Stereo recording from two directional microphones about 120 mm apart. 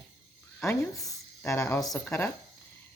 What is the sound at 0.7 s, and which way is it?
Speech, 25° left (ahead or behind).